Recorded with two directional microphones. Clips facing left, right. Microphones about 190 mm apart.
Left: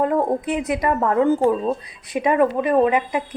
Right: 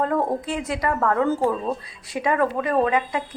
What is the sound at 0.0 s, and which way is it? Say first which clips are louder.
A woman's voice: left 3 dB; 15° left (ahead or behind).